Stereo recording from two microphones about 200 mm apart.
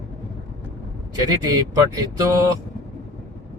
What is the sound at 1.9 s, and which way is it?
Speech, 15° right (ahead or behind).